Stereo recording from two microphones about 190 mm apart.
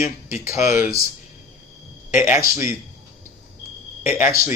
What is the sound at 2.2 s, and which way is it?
Speech, 10° right (ahead or behind).